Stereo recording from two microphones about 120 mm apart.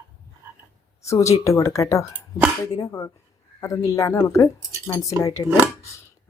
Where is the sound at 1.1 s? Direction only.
25° left (ahead or behind).